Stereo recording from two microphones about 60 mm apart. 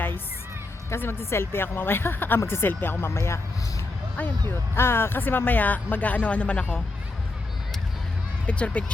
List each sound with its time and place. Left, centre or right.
0.9 s speech: left
4.4 s speech: left; by 6.8 s centre
8.4 s speech: left